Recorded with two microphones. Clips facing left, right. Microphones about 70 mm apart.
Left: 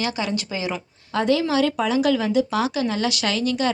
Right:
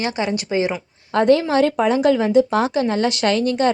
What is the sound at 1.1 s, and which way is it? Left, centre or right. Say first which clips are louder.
A woman's voice: right 5 dB; right.